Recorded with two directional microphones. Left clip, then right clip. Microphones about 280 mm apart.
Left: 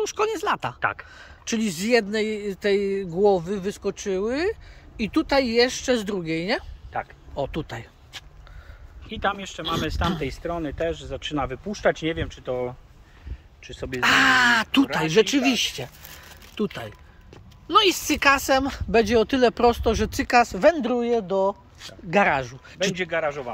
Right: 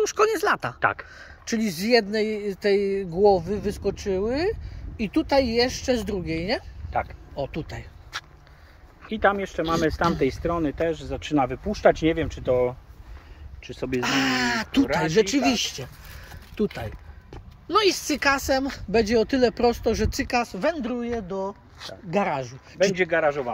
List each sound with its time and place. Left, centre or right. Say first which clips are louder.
0.0 s speech: right 3 dB; centre
0.7 s speech: right 2 dB; right
1.1 s speech: even; centre
6.9 s speech: right 3 dB; right
7.3 s speech: left 2 dB; centre
9.1 s speech: right 6 dB; right
10.2 s speech: right 4 dB; right
13.9 s speech: left 6 dB; centre
22.9 s speech: right 4 dB; right